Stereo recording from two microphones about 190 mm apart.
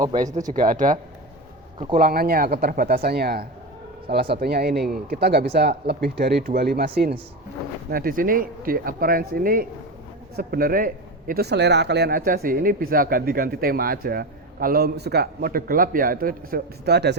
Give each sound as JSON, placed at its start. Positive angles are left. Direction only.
{"t": 0.5, "sound": "speech", "side_deg": -45}
{"t": 2.0, "sound": "speech", "side_deg": -50}